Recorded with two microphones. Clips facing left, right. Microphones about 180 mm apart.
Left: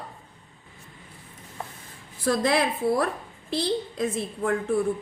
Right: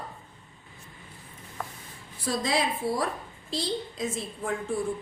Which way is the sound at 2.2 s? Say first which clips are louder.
Left 5 dB; 55° left (ahead or behind).